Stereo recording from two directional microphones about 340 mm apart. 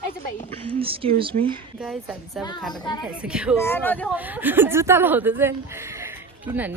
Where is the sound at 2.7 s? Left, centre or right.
Centre.